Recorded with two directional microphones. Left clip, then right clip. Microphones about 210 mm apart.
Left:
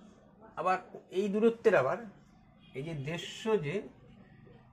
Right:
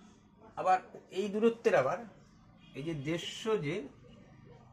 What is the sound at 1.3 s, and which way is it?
Speech, 35° left (ahead or behind).